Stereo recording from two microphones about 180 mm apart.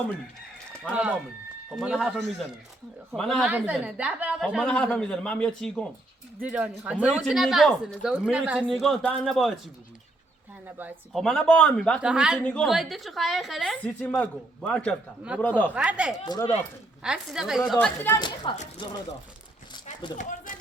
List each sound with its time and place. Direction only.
1.7 s a woman's voice: 5° right (ahead or behind)
6.4 s a woman's voice: 10° right (ahead or behind)
11.1 s a woman's voice: centre (ahead or behind)
15.7 s speech: 5° right (ahead or behind)
16.3 s speech: 20° left (ahead or behind)
17.0 s a woman's voice: 5° right (ahead or behind)
17.7 s speech: 10° left (ahead or behind)
18.5 s speech: 30° left (ahead or behind)
19.7 s a sound: 25° left (ahead or behind)
20.1 s speech: 45° left (ahead or behind)